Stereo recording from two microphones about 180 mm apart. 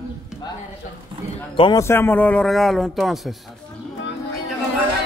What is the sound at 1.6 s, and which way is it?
A man's voice, 20° left (ahead or behind).